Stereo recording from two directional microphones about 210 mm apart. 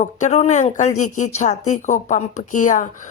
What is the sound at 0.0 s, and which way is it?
Speech, 35° left (ahead or behind).